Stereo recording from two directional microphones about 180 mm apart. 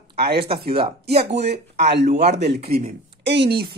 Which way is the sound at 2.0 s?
40° right (ahead or behind).